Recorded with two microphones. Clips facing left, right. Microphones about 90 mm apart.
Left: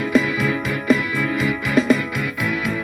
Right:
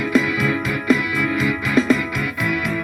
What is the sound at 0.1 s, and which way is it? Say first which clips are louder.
Music: even; centre (ahead or behind).